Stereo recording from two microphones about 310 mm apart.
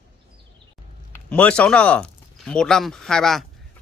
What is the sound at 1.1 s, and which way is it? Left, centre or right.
Speech, centre.